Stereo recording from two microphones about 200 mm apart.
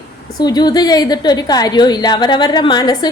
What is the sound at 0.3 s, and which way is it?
A woman's voice, 20° left (ahead or behind).